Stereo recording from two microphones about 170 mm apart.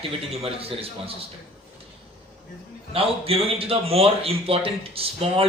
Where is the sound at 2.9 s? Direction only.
35° right (ahead or behind).